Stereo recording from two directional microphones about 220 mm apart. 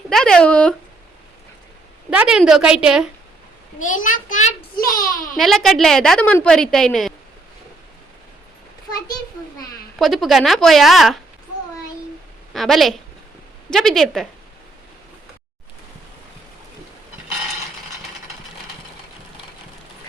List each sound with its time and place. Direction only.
0.1 s speech: centre (ahead or behind)
2.0 s a woman's voice: 5° right (ahead or behind)
3.8 s a child's voice: 35° left (ahead or behind)
5.4 s a woman's voice: centre (ahead or behind)
10.0 s a woman's voice: centre (ahead or behind)
12.5 s a woman's voice: centre (ahead or behind)